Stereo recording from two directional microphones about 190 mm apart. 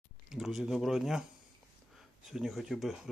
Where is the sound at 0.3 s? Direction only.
Centre (ahead or behind).